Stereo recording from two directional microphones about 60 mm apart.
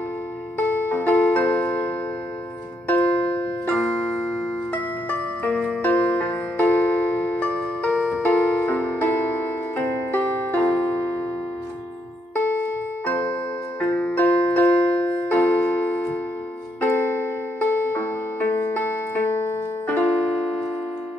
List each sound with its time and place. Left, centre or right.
0.6 s music: left
5.4 s music: left
12.4 s music: left
13.7 s keyboard: left
16.8 s music: left